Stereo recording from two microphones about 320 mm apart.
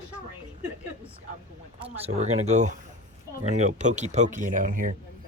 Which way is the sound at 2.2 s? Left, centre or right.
Right.